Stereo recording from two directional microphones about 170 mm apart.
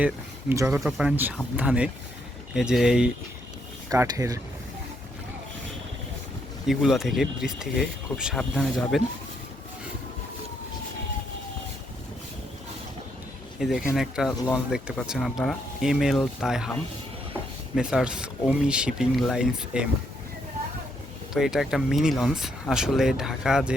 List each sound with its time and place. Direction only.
0.0 s speech: 15° right (ahead or behind)
0.8 s speech: 5° right (ahead or behind)
3.8 s speech: 20° right (ahead or behind)
6.7 s speech: centre (ahead or behind)
13.6 s speech: centre (ahead or behind)
17.7 s speech: 5° right (ahead or behind)
21.3 s speech: centre (ahead or behind)